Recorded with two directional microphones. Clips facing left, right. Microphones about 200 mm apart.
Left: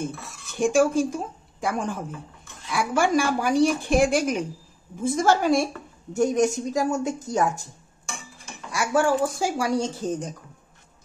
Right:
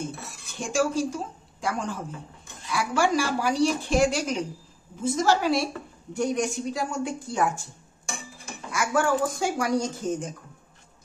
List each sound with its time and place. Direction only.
0.6 s speech: 50° left (ahead or behind)
8.7 s speech: 30° left (ahead or behind)